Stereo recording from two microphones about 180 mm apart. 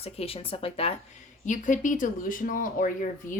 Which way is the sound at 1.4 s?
45° left (ahead or behind).